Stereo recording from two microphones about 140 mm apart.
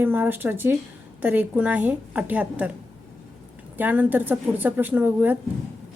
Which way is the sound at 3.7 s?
15° right (ahead or behind).